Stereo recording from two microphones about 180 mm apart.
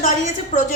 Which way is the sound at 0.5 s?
40° left (ahead or behind).